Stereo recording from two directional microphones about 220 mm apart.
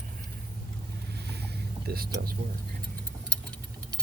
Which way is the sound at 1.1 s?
50° right (ahead or behind).